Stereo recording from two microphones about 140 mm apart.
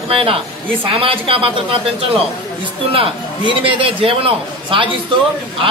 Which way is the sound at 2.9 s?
40° right (ahead or behind).